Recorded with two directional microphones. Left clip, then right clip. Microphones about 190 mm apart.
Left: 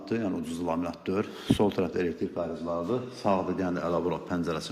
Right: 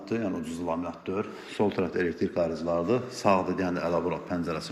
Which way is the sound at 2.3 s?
30° right (ahead or behind).